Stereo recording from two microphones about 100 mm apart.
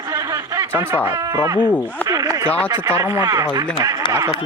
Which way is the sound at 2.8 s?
30° right (ahead or behind).